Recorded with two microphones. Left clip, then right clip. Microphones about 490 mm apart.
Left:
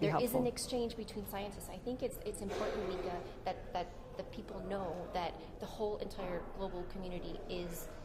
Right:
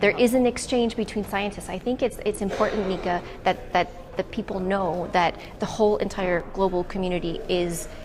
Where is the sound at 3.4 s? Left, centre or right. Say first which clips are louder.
Right 18 dB; right.